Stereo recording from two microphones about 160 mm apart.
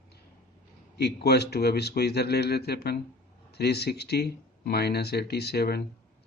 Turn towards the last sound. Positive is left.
turn(degrees=80)